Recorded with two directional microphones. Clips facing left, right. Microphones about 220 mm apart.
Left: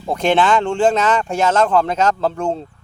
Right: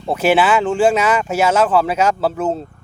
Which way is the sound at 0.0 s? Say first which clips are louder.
Right 1 dB; 5° right (ahead or behind).